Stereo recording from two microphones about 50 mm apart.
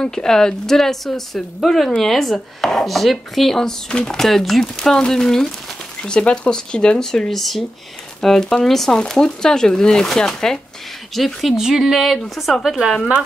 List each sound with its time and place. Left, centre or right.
0.0 s speech: centre
11.5 s speech: centre